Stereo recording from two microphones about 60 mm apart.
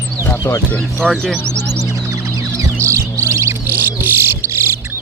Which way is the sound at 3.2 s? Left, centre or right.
Right.